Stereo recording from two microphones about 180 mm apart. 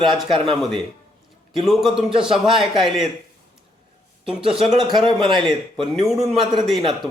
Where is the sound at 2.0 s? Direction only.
30° right (ahead or behind).